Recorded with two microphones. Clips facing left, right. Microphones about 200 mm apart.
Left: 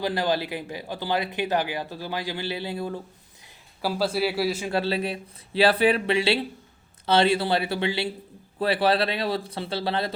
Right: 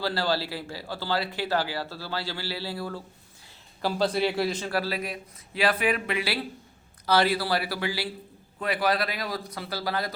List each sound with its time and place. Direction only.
0.0 s speech: 20° left (ahead or behind)
3.8 s a man's voice: 5° left (ahead or behind)
4.7 s speech: 25° left (ahead or behind)